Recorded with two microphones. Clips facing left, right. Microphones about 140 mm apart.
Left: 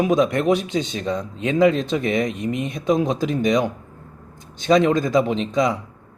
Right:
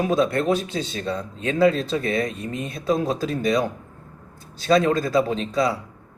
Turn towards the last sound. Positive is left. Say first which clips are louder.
# left 2 dB
turn(degrees=20)  # may be behind; listen again after turning